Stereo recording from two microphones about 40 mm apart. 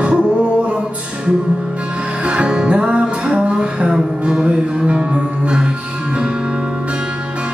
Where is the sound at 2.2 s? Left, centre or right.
Right.